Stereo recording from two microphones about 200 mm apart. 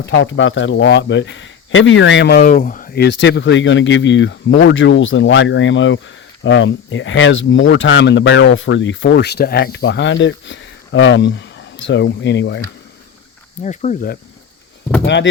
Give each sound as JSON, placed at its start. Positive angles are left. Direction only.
{"t": 0.0, "sound": "speech", "side_deg": 65}
{"t": 2.4, "sound": "speech", "side_deg": 45}
{"t": 13.6, "sound": "speech", "side_deg": 35}
{"t": 15.0, "sound": "speech", "side_deg": 60}